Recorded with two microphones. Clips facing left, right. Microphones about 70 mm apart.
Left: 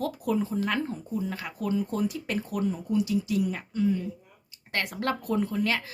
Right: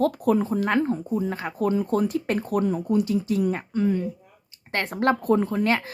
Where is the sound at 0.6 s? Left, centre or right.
Right.